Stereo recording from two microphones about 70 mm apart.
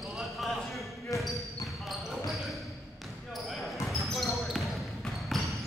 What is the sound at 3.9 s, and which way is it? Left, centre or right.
Basketball bounce, centre.